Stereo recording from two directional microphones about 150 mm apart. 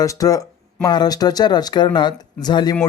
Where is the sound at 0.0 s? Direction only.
25° left (ahead or behind).